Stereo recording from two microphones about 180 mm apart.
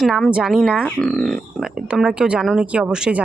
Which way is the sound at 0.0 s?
Centre (ahead or behind).